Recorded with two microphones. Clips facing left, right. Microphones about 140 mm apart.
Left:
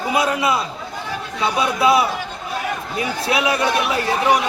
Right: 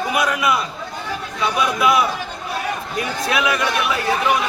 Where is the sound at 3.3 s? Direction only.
30° left (ahead or behind).